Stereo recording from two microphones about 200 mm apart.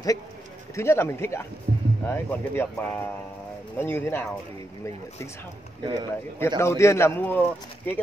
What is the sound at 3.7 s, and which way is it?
Speech, 10° left (ahead or behind).